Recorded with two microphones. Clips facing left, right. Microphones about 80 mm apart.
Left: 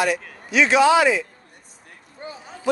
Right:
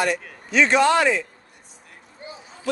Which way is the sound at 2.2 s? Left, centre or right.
Left.